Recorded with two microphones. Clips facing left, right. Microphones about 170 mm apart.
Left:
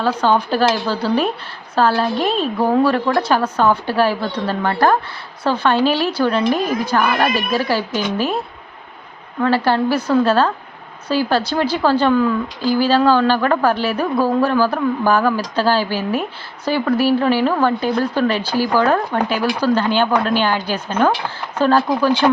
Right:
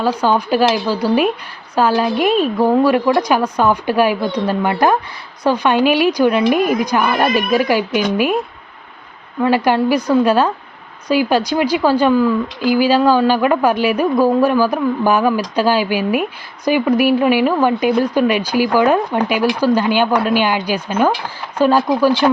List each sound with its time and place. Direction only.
0.0 s a woman's voice: 10° right (ahead or behind)
9.4 s a woman's voice: 15° right (ahead or behind)